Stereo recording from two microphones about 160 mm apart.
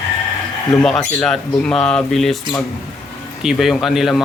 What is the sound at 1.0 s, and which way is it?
Speech, 10° left (ahead or behind).